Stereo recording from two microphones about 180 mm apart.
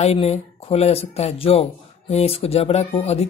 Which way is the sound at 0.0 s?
35° left (ahead or behind).